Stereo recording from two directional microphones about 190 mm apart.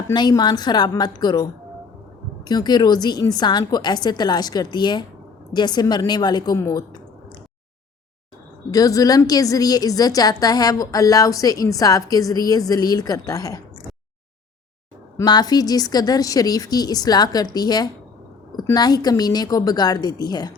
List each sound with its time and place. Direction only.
0.1 s a woman's voice: 20° left (ahead or behind)
8.7 s a woman's voice: 20° left (ahead or behind)
15.2 s a woman's voice: 20° left (ahead or behind)